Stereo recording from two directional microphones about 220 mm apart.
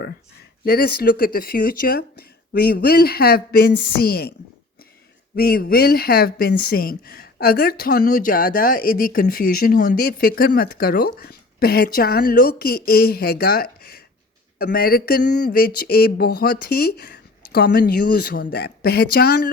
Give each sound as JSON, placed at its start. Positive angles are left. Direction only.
{"t": 0.6, "sound": "speech", "side_deg": 45}
{"t": 5.4, "sound": "speech", "side_deg": 45}